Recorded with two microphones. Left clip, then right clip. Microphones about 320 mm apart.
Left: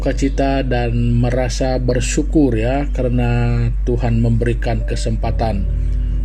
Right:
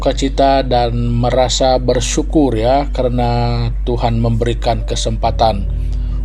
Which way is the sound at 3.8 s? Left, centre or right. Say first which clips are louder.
Right 4 dB; right.